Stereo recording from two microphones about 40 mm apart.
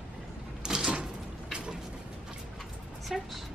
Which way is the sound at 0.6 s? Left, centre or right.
Centre.